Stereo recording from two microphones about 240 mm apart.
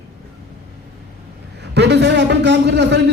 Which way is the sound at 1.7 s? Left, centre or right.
Right.